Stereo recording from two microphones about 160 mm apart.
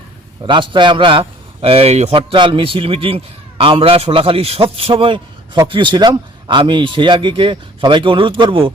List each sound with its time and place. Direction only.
0.4 s speech: 30° right (ahead or behind)